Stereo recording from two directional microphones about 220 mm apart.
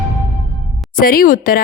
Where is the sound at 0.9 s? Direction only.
40° left (ahead or behind).